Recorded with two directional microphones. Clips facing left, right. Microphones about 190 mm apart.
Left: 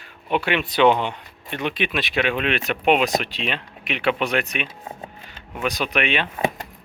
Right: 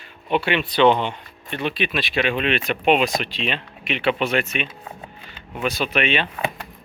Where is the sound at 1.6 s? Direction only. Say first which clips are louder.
Even; 15° left (ahead or behind).